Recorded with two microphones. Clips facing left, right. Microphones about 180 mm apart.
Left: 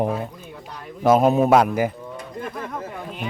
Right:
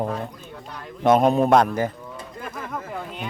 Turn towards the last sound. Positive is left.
turn(degrees=0)  # may be behind; listen again after turning